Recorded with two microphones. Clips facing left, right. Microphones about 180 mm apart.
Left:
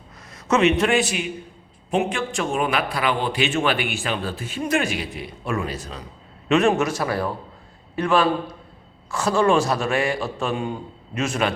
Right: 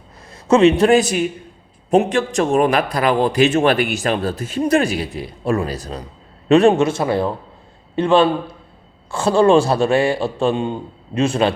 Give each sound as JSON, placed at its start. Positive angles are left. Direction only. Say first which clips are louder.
{"t": 0.4, "sound": "a man's voice", "louder": "right 7 dB", "side_deg": -30}